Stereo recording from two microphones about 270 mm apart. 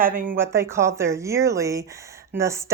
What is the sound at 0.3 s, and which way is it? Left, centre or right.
Speech, centre.